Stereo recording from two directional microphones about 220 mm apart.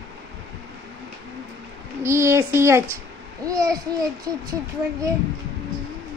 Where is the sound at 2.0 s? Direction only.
10° right (ahead or behind).